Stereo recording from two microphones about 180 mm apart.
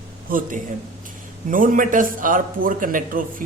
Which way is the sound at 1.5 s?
50° right (ahead or behind).